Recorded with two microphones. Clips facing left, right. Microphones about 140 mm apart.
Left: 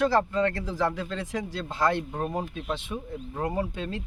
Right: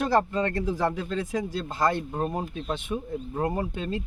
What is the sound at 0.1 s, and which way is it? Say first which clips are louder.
Speech: even; 15° right (ahead or behind).